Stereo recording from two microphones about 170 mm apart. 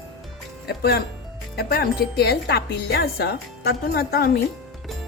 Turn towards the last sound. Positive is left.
turn(degrees=65)  # may be behind; listen again after turning